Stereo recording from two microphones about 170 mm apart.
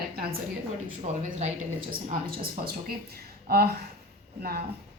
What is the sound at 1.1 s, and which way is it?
Speech, 40° right (ahead or behind).